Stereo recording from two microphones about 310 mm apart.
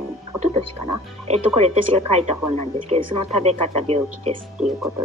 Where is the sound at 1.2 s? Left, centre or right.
Right.